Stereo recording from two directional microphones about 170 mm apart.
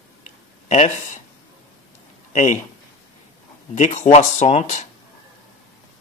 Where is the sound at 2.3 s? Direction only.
45° left (ahead or behind).